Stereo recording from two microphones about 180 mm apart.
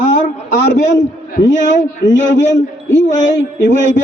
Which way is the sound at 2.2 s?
85° left.